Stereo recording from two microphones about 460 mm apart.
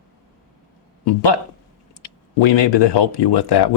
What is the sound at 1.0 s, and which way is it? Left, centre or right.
Speech, left.